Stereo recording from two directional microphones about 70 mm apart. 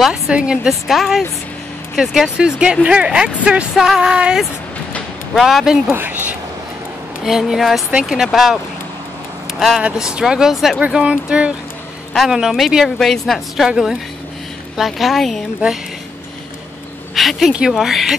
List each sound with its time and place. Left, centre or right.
0.1 s speech: centre
5.9 s speech: right
7.2 s speech: centre
9.8 s speech: centre
10.8 s speech: centre
14.8 s speech: centre
17.1 s a sound: centre
17.5 s speech: centre